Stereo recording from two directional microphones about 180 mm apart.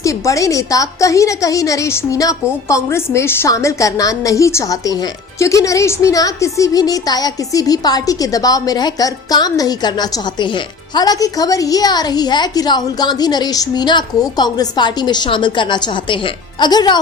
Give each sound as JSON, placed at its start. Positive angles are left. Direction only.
{"t": 0.0, "sound": "a woman's voice", "side_deg": 20}